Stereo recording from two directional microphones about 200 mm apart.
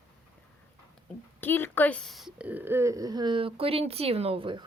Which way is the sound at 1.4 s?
10° left (ahead or behind).